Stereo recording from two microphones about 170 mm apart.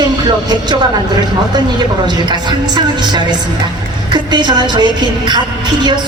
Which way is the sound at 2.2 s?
25° right (ahead or behind).